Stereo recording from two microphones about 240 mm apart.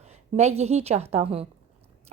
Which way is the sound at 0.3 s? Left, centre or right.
Right.